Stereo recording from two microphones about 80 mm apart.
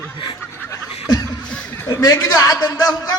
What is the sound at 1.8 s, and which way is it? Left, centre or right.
A man's voice, left.